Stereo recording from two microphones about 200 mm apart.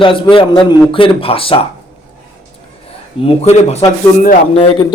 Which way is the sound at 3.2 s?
30° left (ahead or behind).